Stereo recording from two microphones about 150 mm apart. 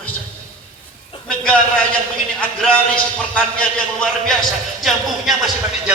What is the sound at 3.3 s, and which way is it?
A man's voice, 5° left (ahead or behind).